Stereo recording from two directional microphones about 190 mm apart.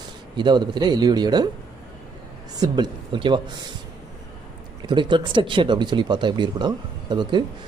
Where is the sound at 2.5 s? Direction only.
20° right (ahead or behind).